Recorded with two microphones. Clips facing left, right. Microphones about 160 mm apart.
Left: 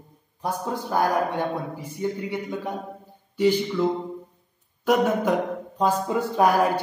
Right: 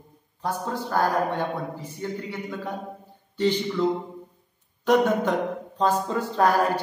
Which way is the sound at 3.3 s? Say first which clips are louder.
Left 3 dB; 10° left (ahead or behind).